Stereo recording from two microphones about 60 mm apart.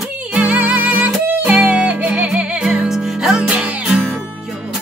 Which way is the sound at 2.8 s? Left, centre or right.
Centre.